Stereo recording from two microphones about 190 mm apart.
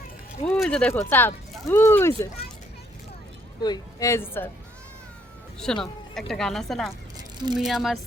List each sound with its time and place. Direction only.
0.4 s a woman's voice: centre (ahead or behind)
3.6 s a woman's voice: 20° left (ahead or behind)
5.5 s a woman's voice: 5° left (ahead or behind)